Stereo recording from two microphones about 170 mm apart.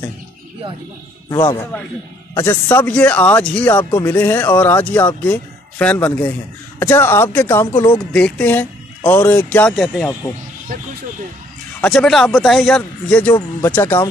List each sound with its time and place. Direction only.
1.3 s speech: 25° left (ahead or behind)
2.3 s speech: 15° left (ahead or behind)
10.7 s speech: 55° right (ahead or behind)
11.8 s a man's voice: 5° left (ahead or behind)